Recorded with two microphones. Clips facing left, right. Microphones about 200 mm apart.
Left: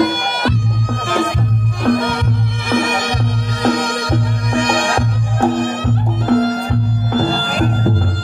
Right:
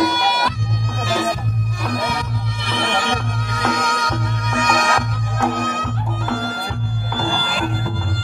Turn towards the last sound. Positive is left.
turn(degrees=40)  # may be behind; listen again after turning